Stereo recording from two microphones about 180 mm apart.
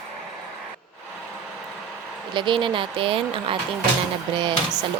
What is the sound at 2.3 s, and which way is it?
Speech, 25° right (ahead or behind).